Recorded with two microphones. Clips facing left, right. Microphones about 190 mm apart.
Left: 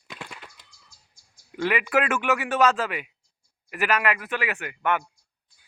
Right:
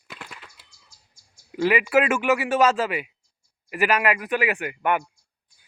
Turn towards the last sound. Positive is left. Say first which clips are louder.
# right 2 dB
turn(degrees=-10)  # may be behind; listen again after turning